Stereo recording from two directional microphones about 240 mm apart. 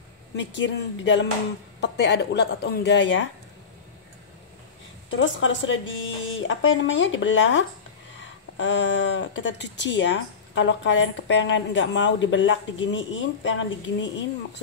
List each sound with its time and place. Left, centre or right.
0.4 s speech: left
5.1 s speech: left